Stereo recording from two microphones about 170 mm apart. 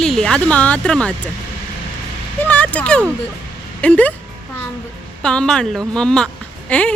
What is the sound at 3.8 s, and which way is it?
Speech, 5° left (ahead or behind).